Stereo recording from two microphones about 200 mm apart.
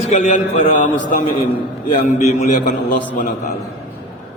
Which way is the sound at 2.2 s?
35° left (ahead or behind).